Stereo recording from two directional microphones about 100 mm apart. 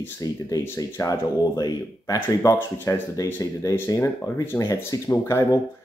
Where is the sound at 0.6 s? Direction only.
30° left (ahead or behind).